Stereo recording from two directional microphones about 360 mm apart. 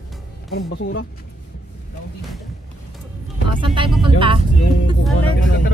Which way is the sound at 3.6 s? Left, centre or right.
Centre.